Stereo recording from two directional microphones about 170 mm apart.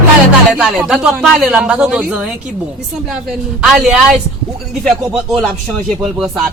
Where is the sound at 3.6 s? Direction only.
5° right (ahead or behind).